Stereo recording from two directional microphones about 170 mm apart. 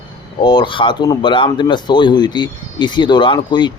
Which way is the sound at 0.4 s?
25° left (ahead or behind).